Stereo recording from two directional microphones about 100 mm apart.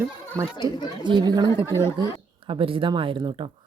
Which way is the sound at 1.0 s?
50° right (ahead or behind).